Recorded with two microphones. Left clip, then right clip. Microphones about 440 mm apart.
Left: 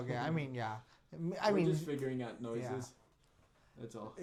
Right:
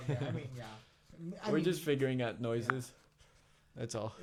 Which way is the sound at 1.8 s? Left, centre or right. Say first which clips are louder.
Right 6 dB; right.